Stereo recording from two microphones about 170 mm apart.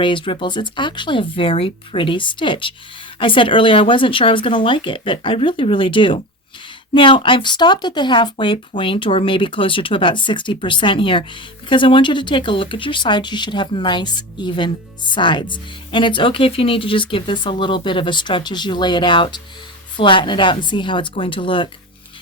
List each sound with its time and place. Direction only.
0.0 s speech: 30° left (ahead or behind)